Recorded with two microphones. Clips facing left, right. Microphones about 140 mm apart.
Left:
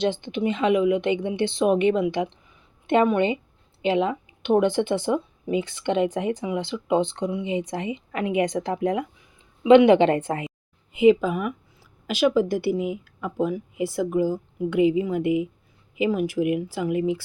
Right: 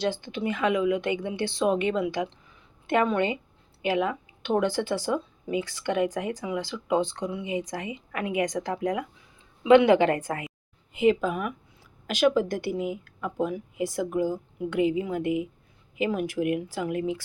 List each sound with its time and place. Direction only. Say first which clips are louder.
0.0 s speech: left 4 dB; 20° left (ahead or behind)
10.9 s speech: left 5 dB; 5° left (ahead or behind)